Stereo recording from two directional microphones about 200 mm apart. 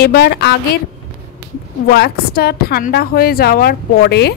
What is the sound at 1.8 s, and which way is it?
A woman's voice, 50° left (ahead or behind).